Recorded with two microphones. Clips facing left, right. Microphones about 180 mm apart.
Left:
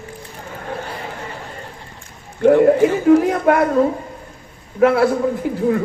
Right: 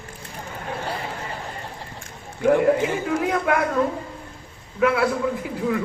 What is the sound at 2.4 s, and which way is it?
Speech, 45° left (ahead or behind).